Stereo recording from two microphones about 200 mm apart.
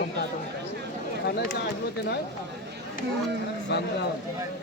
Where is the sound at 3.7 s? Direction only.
55° left (ahead or behind).